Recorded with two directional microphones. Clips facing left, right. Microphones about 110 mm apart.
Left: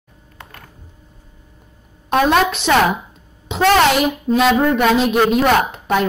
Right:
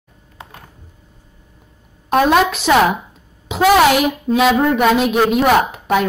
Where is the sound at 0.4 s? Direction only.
20° right (ahead or behind).